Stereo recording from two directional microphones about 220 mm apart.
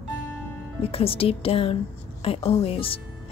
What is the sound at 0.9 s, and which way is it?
Music, 25° left (ahead or behind).